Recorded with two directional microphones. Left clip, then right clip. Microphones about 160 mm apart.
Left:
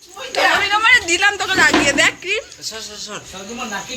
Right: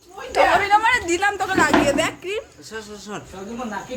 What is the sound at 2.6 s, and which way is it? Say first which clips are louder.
Speech: left 5 dB; 80° right.